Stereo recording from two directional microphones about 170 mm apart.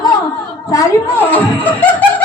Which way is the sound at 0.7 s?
15° left (ahead or behind).